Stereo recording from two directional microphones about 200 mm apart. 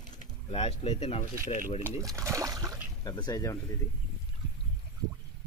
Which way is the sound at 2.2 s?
15° right (ahead or behind).